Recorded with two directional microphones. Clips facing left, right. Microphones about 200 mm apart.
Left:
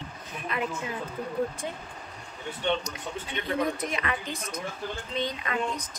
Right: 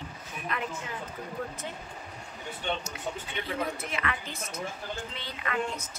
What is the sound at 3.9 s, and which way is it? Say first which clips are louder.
A woman's voice: left 3 dB; 15° left (ahead or behind).